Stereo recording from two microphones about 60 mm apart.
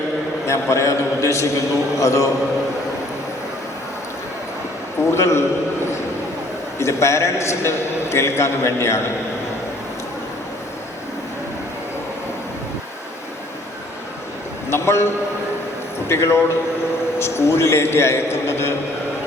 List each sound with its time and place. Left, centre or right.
0.4 s a man's voice: left
5.1 s a man's voice: left
6.7 s a man's voice: left
14.7 s a sound: left
16.0 s a man's voice: left